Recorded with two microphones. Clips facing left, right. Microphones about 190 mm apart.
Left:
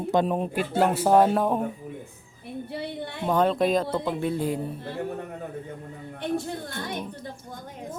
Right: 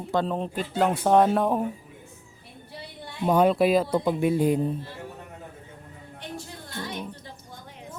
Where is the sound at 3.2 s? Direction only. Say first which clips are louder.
Right 2 dB; 10° right (ahead or behind).